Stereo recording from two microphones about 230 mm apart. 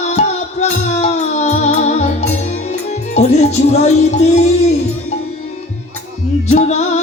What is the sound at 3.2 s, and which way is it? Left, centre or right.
Music, left.